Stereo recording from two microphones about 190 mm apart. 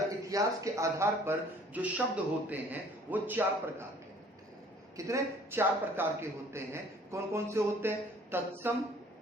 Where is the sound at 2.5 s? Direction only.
10° right (ahead or behind).